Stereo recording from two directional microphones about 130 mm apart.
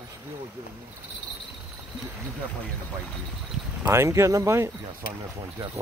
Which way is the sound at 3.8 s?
20° right (ahead or behind).